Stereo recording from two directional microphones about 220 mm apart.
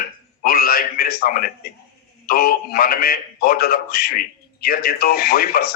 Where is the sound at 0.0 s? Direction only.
45° left (ahead or behind).